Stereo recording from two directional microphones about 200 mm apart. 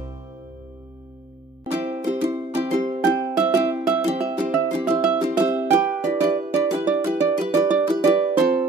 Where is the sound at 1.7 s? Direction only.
30° right (ahead or behind).